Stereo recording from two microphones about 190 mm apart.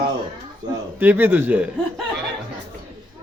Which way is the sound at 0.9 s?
10° right (ahead or behind).